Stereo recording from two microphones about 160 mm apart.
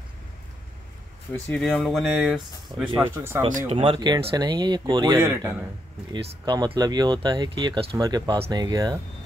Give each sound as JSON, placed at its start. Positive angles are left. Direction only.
{"t": 1.3, "sound": "speech", "side_deg": 5}
{"t": 3.6, "sound": "speech", "side_deg": -35}
{"t": 5.2, "sound": "speech", "side_deg": -15}
{"t": 6.1, "sound": "speech", "side_deg": -25}